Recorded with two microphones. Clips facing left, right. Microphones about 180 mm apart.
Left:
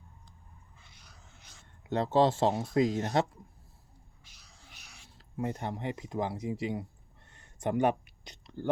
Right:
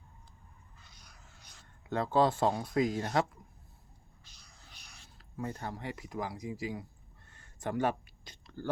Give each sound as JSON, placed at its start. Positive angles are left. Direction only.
{"t": 1.9, "sound": "speech", "side_deg": 25}
{"t": 4.4, "sound": "music", "side_deg": 5}
{"t": 5.1, "sound": "speech", "side_deg": 20}
{"t": 7.3, "sound": "a sound", "side_deg": 20}